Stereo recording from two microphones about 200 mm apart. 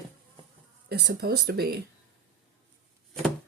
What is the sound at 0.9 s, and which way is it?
Speech, 55° right (ahead or behind).